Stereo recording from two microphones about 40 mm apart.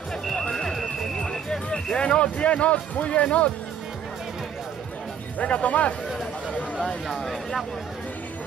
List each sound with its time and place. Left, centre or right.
0.3 s music: centre
1.7 s speech: left
5.4 s speech: left
7.1 s speech: centre